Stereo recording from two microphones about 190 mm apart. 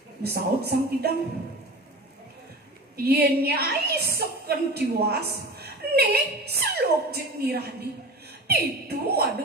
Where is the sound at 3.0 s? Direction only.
55° right (ahead or behind).